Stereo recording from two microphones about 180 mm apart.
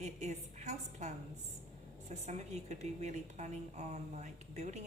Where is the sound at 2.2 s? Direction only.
40° right (ahead or behind).